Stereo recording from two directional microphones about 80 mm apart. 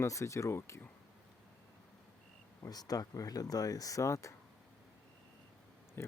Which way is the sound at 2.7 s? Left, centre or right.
Left.